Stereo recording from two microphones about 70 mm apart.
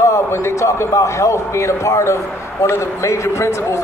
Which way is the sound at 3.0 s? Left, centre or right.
Left.